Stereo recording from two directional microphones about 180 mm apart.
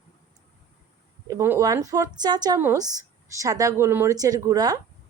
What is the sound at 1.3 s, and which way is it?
A woman's voice, 15° right (ahead or behind).